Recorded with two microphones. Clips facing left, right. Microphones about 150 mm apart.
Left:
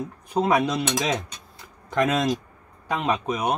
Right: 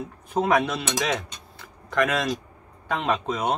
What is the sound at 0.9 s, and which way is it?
Cutlery, 20° left (ahead or behind).